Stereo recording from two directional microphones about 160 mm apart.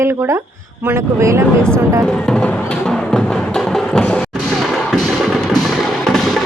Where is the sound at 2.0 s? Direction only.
5° left (ahead or behind).